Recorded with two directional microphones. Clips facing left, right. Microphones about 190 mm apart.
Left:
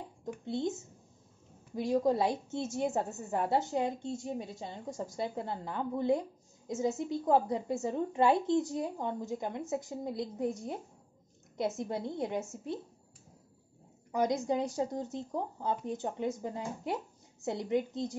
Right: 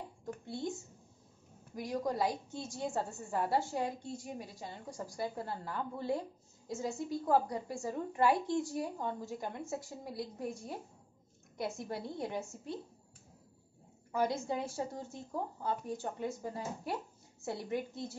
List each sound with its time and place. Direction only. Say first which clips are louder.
0.2 s a woman's voice: left 6 dB; 20° left (ahead or behind)
14.1 s a woman's voice: left 4 dB; 15° left (ahead or behind)